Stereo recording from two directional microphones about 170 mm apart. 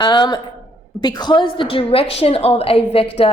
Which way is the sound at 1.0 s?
25° left (ahead or behind).